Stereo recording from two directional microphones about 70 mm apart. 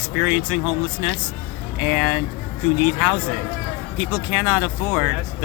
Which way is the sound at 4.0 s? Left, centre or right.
Centre.